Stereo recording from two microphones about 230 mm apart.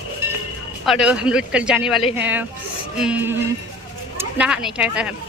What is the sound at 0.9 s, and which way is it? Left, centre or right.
Speech, centre.